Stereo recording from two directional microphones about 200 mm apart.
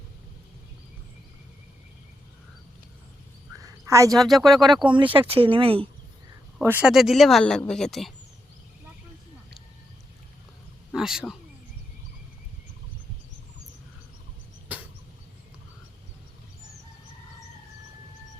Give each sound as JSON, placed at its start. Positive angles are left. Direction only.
{"t": 3.8, "sound": "speech", "side_deg": -15}
{"t": 4.1, "sound": "speech", "side_deg": 0}
{"t": 4.8, "sound": "speech", "side_deg": -25}
{"t": 6.7, "sound": "speech", "side_deg": -5}
{"t": 10.9, "sound": "speech", "side_deg": 0}